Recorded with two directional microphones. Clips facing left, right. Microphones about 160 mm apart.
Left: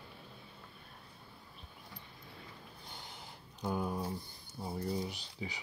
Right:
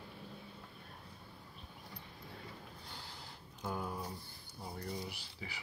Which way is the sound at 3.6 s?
20° left (ahead or behind).